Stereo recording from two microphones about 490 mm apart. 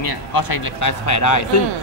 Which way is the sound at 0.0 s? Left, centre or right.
Left.